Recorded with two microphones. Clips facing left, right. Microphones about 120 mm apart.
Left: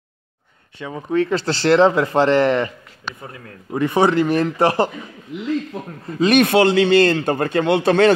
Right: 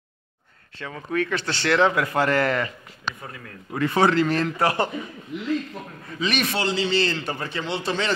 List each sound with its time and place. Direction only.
0.7 s speech: 15° left (ahead or behind)
1.1 s speech: 30° left (ahead or behind)
3.7 s speech: 20° left (ahead or behind)
4.6 s speech: 30° left (ahead or behind)
6.0 s a man's voice: 45° left (ahead or behind)